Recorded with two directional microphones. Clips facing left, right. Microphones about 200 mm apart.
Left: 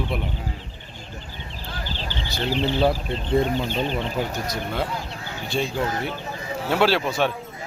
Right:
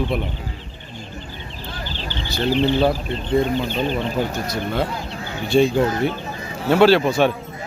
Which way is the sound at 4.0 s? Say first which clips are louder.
Right 4 dB; 15° left (ahead or behind).